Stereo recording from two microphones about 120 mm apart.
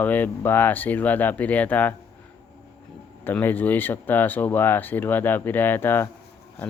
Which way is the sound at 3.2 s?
15° left (ahead or behind).